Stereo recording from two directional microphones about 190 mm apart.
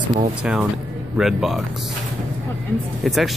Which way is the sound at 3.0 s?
Centre (ahead or behind).